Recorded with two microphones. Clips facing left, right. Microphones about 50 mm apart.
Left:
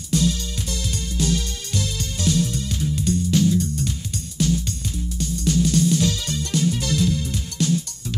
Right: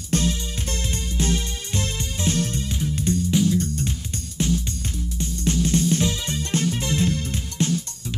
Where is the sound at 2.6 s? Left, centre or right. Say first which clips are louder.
Left 1 dB; right.